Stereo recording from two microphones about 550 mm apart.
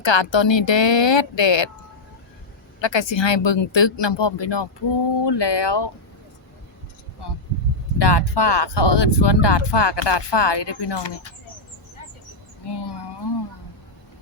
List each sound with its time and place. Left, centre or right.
0.0 s speech: left
2.8 s speech: left
7.9 s speech: left
12.6 s a sound: left